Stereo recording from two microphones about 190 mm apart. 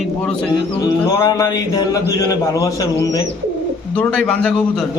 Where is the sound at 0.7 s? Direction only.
20° left (ahead or behind).